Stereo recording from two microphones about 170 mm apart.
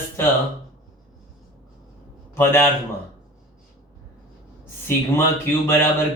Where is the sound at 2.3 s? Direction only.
15° left (ahead or behind).